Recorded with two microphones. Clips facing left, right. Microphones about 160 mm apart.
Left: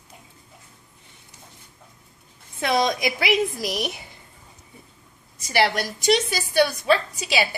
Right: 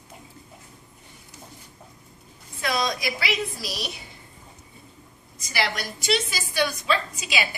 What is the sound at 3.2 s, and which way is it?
Speech, 50° left (ahead or behind).